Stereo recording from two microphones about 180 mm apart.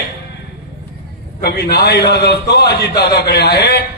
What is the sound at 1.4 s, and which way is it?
A man's voice, 60° left (ahead or behind).